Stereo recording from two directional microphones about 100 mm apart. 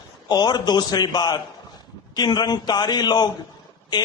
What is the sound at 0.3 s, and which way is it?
A man's voice, 45° left (ahead or behind).